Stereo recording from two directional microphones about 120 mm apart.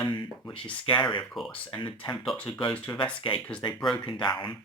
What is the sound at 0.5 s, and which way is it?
Speech, 45° left (ahead or behind).